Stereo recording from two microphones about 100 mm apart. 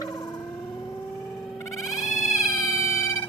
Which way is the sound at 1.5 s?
35° left (ahead or behind).